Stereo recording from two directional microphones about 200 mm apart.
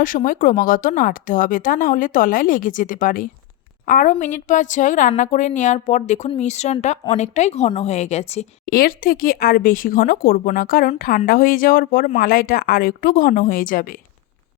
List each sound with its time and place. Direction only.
0.0 s a woman's voice: 40° left (ahead or behind)
8.6 s speech: 45° left (ahead or behind)